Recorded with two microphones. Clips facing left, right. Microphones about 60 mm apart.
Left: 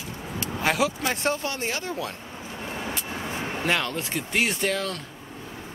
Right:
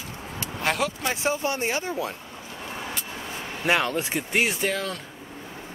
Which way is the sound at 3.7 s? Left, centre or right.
Centre.